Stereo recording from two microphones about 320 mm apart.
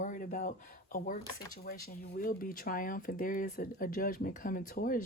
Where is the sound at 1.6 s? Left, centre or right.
Left.